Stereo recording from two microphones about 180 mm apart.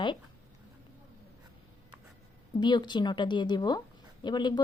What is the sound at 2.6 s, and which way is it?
Speech, 25° left (ahead or behind).